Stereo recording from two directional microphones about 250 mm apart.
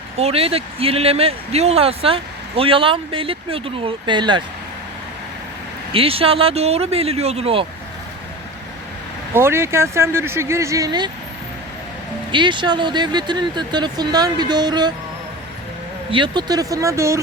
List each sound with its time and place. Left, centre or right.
0.2 s speech: right
5.9 s speech: right
9.3 s speech: centre
12.3 s speech: centre
16.1 s speech: centre